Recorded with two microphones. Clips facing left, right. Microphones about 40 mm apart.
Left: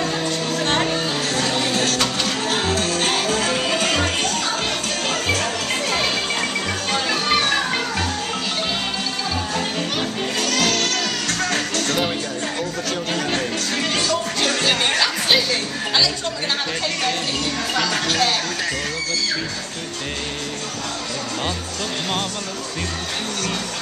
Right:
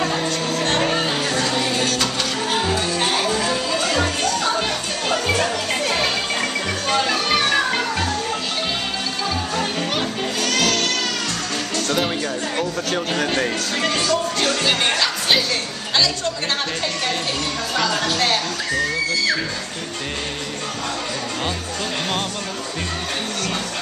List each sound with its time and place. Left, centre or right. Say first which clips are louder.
0.0 s music: right 1 dB; centre
1.4 s music: even; centre
2.7 s music: even; left
3.4 s music: left 1 dB; left
6.9 s music: right 2 dB; centre
9.6 s music: right 1 dB; centre
13.7 s music: right 2 dB; centre